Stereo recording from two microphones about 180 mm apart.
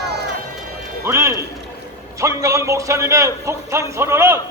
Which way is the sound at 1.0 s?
15° right (ahead or behind).